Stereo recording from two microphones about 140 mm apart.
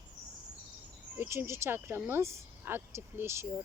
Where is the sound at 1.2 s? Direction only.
15° right (ahead or behind).